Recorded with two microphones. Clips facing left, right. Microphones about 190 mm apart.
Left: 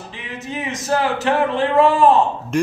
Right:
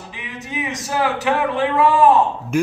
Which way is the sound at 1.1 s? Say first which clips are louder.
Left 1 dB; 15° right (ahead or behind).